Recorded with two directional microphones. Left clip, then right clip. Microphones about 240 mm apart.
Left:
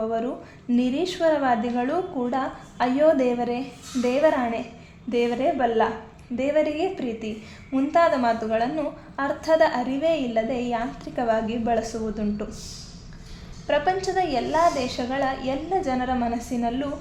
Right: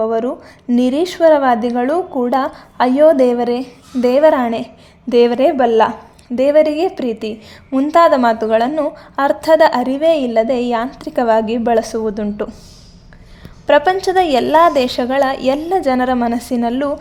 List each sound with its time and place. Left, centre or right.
0.0 s a woman's voice: right
13.7 s a woman's voice: right